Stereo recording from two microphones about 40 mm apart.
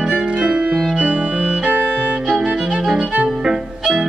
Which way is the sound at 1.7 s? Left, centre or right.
Right.